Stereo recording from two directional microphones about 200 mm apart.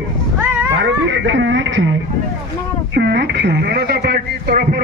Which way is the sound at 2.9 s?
60° right (ahead or behind).